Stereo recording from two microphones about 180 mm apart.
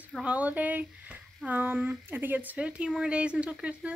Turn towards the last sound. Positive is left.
turn(degrees=-5)  # may be behind; listen again after turning